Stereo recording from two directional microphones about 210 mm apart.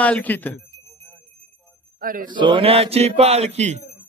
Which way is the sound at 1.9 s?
40° right (ahead or behind).